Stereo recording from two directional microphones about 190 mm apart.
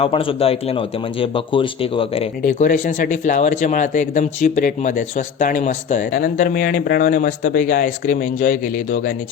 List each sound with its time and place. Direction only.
0.0 s speech: 30° left (ahead or behind)
2.4 s speech: 40° left (ahead or behind)